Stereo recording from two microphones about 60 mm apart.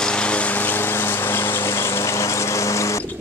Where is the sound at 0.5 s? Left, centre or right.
Left.